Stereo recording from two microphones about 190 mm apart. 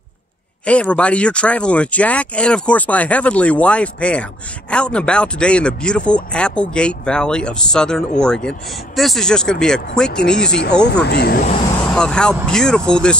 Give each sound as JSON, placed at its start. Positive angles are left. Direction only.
{"t": 0.7, "sound": "speech", "side_deg": 5}
{"t": 10.5, "sound": "speech", "side_deg": 60}
{"t": 11.9, "sound": "speech", "side_deg": 5}